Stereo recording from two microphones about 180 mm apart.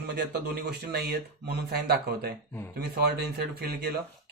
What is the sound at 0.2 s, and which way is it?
Speech, 65° right (ahead or behind).